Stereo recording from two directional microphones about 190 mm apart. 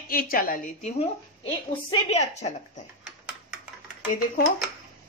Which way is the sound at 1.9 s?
35° left (ahead or behind).